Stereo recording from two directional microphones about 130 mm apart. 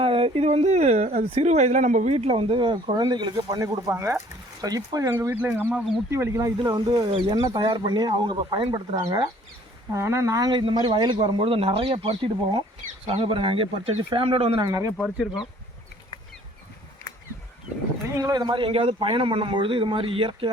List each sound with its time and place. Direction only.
0.0 s speech: 45° right (ahead or behind); by 6.5 s 20° right (ahead or behind)
6.6 s speech: 35° right (ahead or behind)
9.0 s speech: 30° right (ahead or behind); by 14.6 s 50° right (ahead or behind)
14.6 s speech: 25° right (ahead or behind)
14.9 s speech: centre (ahead or behind)
18.2 s speech: 30° right (ahead or behind)